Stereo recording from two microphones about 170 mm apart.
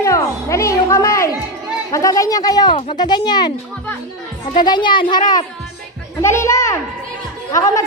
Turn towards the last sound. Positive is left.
turn(degrees=20)  # may be behind; listen again after turning